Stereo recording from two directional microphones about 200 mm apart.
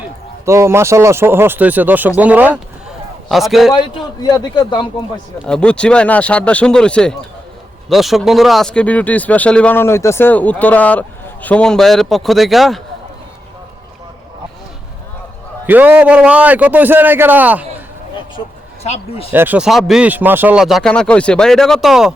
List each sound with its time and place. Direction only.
0.4 s a man's voice: 15° right (ahead or behind)
3.8 s a man's voice: 20° left (ahead or behind)
5.5 s speech: 5° left (ahead or behind)
15.6 s a man's voice: 10° right (ahead or behind)
18.8 s speech: 30° left (ahead or behind)
19.3 s speech: 10° right (ahead or behind)